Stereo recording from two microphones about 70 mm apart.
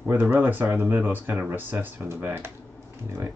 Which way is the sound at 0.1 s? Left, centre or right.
Right.